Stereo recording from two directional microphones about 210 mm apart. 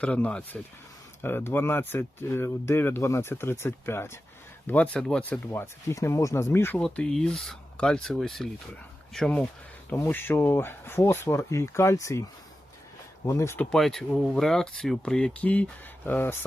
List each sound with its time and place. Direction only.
0.0 s speech: 5° left (ahead or behind)
13.2 s speech: 10° left (ahead or behind)